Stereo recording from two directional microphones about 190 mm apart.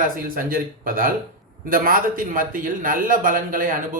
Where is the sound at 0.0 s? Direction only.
50° right (ahead or behind).